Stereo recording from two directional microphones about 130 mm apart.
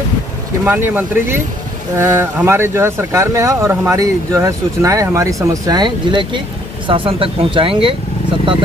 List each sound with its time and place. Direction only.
0.7 s speech: 15° right (ahead or behind); by 7.9 s 45° right (ahead or behind)